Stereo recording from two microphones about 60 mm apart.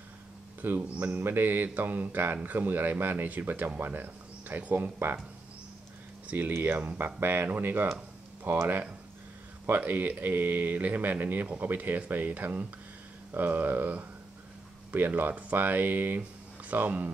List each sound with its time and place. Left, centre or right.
0.6 s a man's voice: right
4.9 s speech: right
6.2 s speech: right
9.7 s speech: right